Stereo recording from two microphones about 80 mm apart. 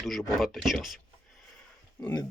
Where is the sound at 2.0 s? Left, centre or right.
Left.